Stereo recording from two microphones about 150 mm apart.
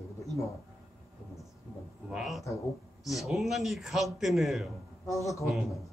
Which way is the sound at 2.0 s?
5° right (ahead or behind).